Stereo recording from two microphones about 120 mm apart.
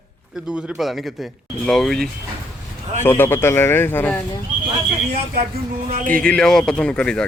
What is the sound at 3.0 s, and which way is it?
A man's voice, 20° left (ahead or behind).